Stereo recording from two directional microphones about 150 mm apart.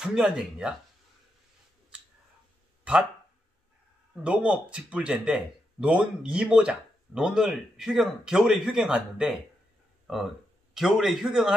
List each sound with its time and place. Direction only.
0.0 s a man's voice: 5° right (ahead or behind)
2.8 s a sound: 5° right (ahead or behind)
4.2 s a man's voice: 5° right (ahead or behind)